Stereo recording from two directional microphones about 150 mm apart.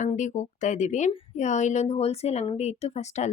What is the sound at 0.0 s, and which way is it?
A woman's voice, 55° left (ahead or behind).